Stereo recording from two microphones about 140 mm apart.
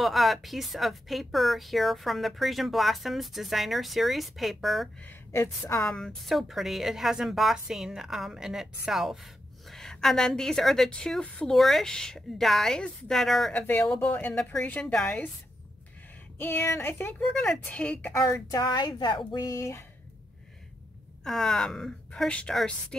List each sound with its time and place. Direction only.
0.0 s a woman's voice: centre (ahead or behind)
5.0 s speech: 20° left (ahead or behind)
5.8 s a woman's voice: 5° left (ahead or behind)
16.3 s a woman's voice: 15° left (ahead or behind)
17.3 s a woman's voice: 5° left (ahead or behind)
18.5 s speech: 25° left (ahead or behind)
21.2 s a woman's voice: 5° left (ahead or behind)